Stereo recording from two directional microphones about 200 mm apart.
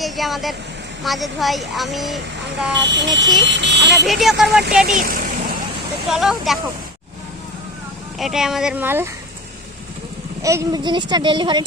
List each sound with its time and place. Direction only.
0.0 s speech: centre (ahead or behind)
2.7 s speech: 65° right (ahead or behind)
4.0 s speech: centre (ahead or behind)
4.9 s vehicle: 45° right (ahead or behind)
6.1 s speech: centre (ahead or behind)
8.2 s speech: centre (ahead or behind)
10.4 s speech: 15° right (ahead or behind)